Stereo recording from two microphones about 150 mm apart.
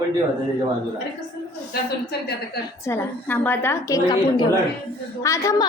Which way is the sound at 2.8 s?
15° left (ahead or behind).